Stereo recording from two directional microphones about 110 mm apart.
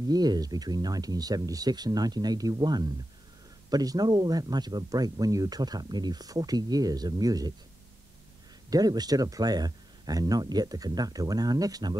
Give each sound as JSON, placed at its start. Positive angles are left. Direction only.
{"t": 0.1, "sound": "speech", "side_deg": -35}
{"t": 8.6, "sound": "speech", "side_deg": -35}